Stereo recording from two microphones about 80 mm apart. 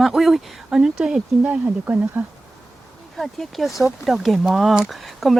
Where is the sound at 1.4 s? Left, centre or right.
Centre.